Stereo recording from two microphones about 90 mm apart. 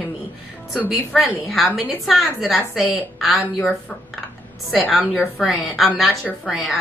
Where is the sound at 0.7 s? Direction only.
10° right (ahead or behind).